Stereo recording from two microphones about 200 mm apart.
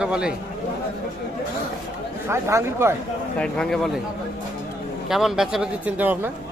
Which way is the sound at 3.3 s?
5° left (ahead or behind).